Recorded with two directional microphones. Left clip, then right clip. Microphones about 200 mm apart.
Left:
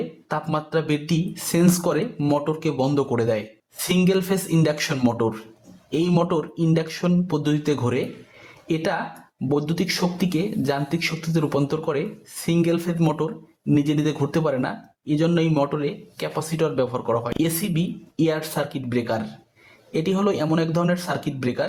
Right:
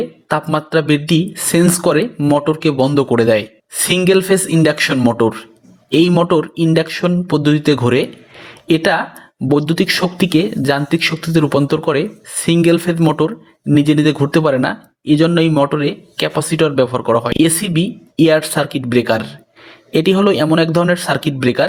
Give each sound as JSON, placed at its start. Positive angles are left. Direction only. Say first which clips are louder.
{"t": 0.3, "sound": "speech", "louder": "right 9 dB", "side_deg": -20}
{"t": 4.6, "sound": "speech", "louder": "right 9 dB", "side_deg": -20}